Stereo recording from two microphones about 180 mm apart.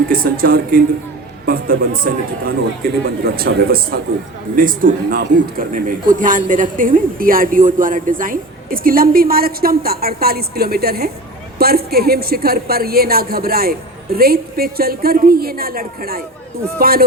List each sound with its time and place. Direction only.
0.1 s a man's voice: 55° right (ahead or behind)